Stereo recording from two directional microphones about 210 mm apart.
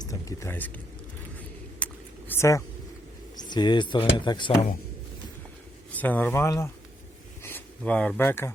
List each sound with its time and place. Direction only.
0.0 s speech: 15° left (ahead or behind)
1.8 s a sound: 10° left (ahead or behind)
3.5 s speech: 20° left (ahead or behind)
5.9 s speech: 10° left (ahead or behind)